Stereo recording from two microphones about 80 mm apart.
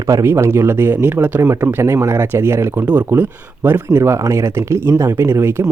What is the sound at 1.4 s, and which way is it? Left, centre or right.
Speech, right.